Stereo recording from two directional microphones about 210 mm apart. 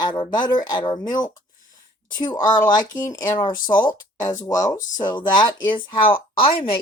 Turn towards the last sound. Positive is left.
turn(degrees=25)  # may be behind; listen again after turning